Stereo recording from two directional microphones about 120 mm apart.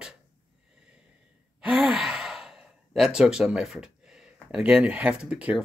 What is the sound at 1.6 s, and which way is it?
Speech, 10° right (ahead or behind).